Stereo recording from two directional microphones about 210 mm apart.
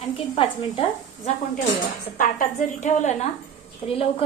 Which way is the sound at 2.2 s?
40° left (ahead or behind).